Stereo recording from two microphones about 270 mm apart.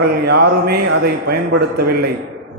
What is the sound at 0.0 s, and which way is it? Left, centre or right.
Speech, right.